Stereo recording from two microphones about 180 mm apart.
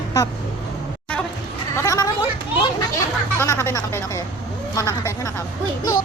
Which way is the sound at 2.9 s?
15° left (ahead or behind).